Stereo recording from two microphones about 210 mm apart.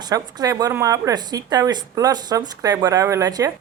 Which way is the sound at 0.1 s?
15° right (ahead or behind).